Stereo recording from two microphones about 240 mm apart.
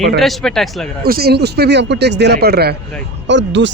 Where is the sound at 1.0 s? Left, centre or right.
Right.